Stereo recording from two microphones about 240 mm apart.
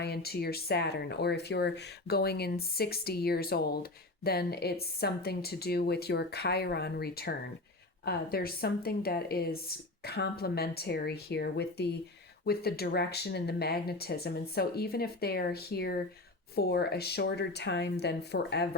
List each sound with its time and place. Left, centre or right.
0.0 s a woman's voice: left